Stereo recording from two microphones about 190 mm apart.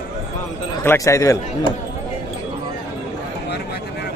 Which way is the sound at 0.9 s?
15° left (ahead or behind).